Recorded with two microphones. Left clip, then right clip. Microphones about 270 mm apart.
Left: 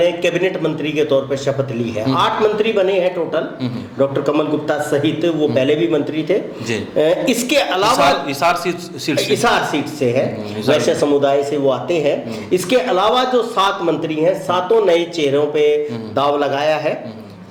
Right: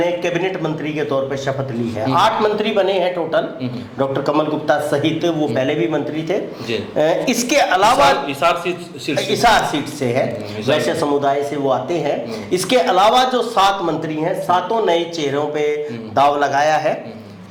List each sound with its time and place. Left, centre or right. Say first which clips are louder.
0.0 s a man's voice: left 3 dB; centre
9.1 s a man's voice: right 1 dB; centre
15.5 s a sound: left 5 dB; right
16.1 s a man's voice: right 2 dB; centre